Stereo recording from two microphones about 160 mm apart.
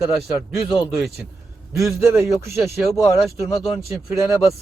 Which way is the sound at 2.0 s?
15° right (ahead or behind).